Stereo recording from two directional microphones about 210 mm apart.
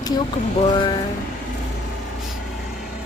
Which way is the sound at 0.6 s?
25° left (ahead or behind).